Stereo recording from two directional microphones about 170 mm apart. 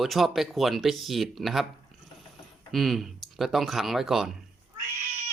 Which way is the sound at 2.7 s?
Centre (ahead or behind).